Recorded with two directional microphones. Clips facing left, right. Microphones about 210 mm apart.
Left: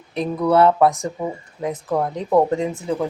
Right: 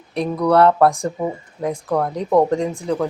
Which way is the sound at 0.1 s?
5° left (ahead or behind).